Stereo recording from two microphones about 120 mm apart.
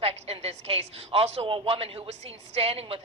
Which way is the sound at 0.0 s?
55° right (ahead or behind).